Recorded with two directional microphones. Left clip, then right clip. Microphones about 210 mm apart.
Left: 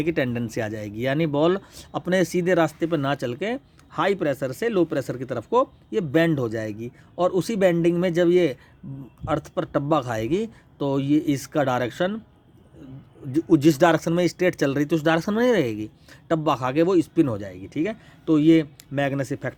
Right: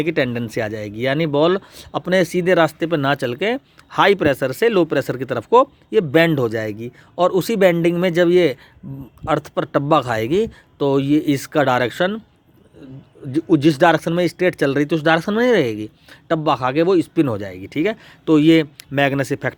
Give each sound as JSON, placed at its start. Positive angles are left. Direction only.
{"t": 0.0, "sound": "speech", "side_deg": -15}
{"t": 13.3, "sound": "speech", "side_deg": -15}